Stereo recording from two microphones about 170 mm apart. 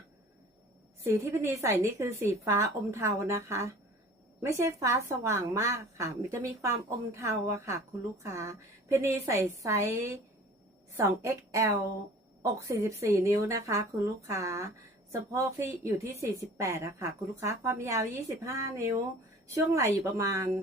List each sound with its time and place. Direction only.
1.0 s a woman's voice: 15° right (ahead or behind)